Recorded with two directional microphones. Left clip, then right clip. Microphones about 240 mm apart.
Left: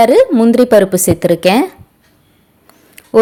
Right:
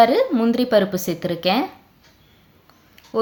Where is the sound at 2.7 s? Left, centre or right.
Left.